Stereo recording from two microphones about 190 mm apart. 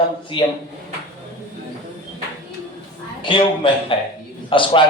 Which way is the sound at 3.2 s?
25° left (ahead or behind).